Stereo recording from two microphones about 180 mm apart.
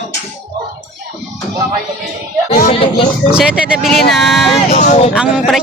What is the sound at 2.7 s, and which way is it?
Speech, 30° left (ahead or behind).